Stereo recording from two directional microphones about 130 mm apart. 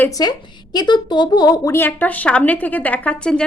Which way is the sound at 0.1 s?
30° left (ahead or behind).